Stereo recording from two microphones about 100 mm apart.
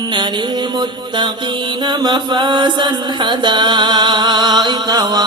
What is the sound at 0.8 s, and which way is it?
Mantra, 50° right (ahead or behind).